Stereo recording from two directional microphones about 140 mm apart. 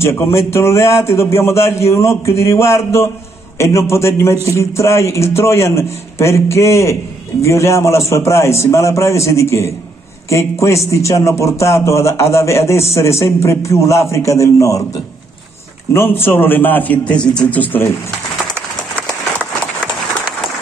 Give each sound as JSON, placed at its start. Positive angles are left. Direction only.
{"t": 0.3, "sound": "a man's voice", "side_deg": 20}
{"t": 15.9, "sound": "a man's voice", "side_deg": 15}